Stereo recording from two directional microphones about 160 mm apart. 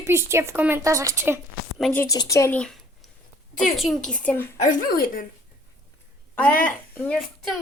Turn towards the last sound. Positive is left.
turn(degrees=0)  # may be behind; listen again after turning